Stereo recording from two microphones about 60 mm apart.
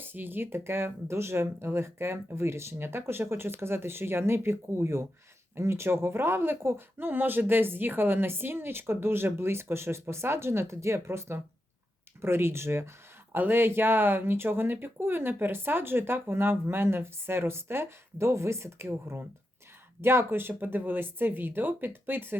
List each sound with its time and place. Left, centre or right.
0.0 s speech: right